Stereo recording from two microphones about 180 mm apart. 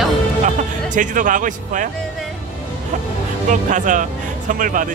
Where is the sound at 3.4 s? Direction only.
45° right (ahead or behind).